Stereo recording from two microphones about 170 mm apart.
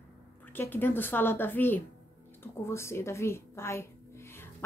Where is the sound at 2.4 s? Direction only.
15° left (ahead or behind).